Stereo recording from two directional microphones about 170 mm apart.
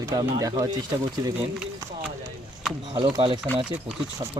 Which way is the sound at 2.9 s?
30° right (ahead or behind).